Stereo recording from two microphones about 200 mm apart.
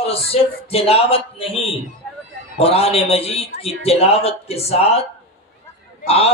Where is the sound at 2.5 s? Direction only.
30° left (ahead or behind).